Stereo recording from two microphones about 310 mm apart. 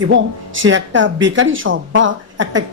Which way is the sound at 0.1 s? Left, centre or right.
Right.